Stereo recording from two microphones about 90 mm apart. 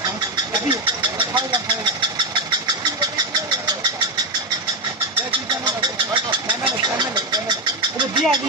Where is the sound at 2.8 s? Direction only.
45° right (ahead or behind).